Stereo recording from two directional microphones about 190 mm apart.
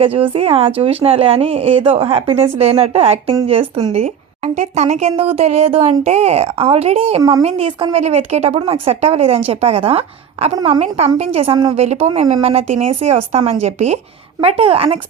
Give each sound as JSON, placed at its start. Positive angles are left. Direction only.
{"t": 0.0, "sound": "a woman's voice", "side_deg": -30}